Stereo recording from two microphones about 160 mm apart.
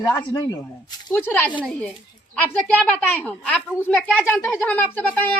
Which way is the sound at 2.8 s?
10° left (ahead or behind).